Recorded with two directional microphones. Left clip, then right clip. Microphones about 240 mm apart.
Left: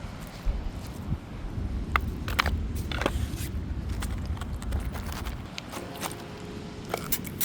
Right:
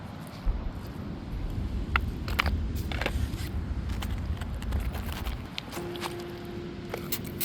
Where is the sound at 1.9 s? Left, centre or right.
Left.